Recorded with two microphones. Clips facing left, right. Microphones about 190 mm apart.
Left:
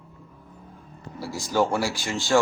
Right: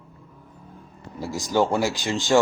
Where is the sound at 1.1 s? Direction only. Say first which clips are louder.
Right 2 dB; 15° right (ahead or behind).